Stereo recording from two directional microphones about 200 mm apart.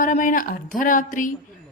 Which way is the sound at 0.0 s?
40° left (ahead or behind).